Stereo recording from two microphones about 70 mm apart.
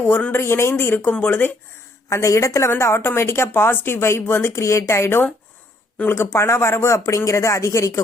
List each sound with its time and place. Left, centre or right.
0.3 s speech: left
2.0 s a woman's voice: left